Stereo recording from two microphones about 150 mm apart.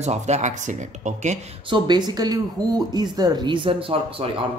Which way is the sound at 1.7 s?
30° right (ahead or behind).